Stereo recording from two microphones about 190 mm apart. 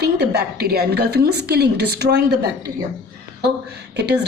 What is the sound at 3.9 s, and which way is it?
Speech, 60° right (ahead or behind).